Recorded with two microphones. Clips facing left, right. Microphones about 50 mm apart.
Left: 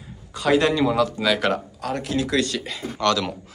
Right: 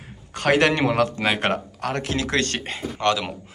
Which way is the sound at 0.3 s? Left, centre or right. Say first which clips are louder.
Even; right.